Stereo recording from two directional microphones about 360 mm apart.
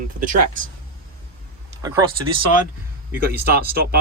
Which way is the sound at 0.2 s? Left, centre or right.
Right.